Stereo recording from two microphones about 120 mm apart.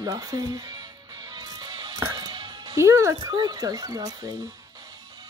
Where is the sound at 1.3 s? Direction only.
35° right (ahead or behind).